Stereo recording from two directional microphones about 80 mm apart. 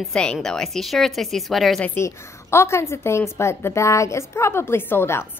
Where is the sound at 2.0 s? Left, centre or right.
Left.